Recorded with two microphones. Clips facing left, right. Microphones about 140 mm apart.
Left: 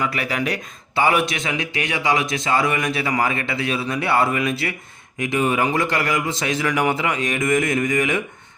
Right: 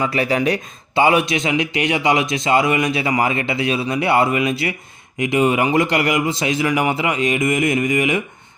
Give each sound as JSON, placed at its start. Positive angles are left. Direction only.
{"t": 0.0, "sound": "a man's voice", "side_deg": -25}